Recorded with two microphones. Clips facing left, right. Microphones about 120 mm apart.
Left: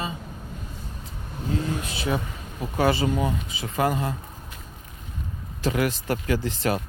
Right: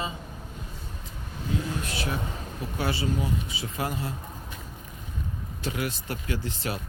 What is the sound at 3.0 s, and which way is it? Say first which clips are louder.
Speech: left 4 dB; 80° left.